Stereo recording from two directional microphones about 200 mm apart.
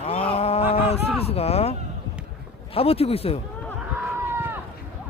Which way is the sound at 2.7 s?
30° left (ahead or behind).